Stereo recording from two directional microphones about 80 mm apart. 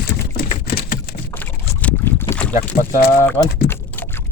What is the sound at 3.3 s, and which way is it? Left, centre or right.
Typing, left.